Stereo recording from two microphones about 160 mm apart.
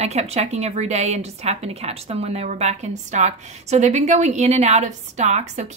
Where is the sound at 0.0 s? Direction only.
40° right (ahead or behind).